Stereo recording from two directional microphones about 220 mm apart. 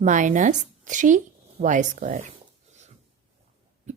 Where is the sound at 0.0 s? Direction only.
35° right (ahead or behind).